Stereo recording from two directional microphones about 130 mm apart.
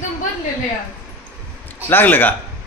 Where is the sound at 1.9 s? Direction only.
15° left (ahead or behind).